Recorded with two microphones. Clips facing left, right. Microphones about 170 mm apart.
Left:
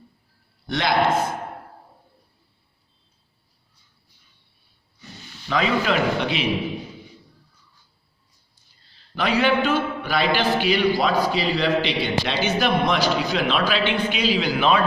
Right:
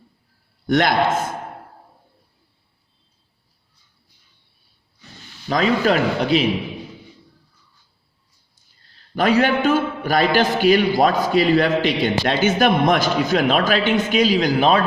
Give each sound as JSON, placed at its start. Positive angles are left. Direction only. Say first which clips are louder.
{"t": 0.7, "sound": "a man's voice", "louder": "right 6 dB", "side_deg": -50}
{"t": 5.5, "sound": "a man's voice", "louder": "right 4 dB", "side_deg": -40}
{"t": 9.1, "sound": "a man's voice", "louder": "right 3 dB", "side_deg": -45}